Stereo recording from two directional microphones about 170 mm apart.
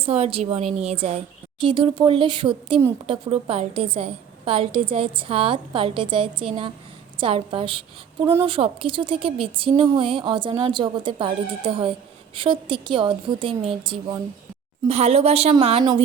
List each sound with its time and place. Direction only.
0.0 s speech: 35° right (ahead or behind)